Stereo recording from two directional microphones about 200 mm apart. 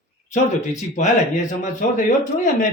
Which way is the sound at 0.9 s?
40° left (ahead or behind).